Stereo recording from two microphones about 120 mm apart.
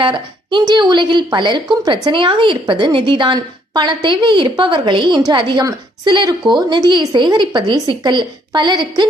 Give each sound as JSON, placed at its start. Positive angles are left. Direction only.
{"t": 0.0, "sound": "a woman's voice", "side_deg": -40}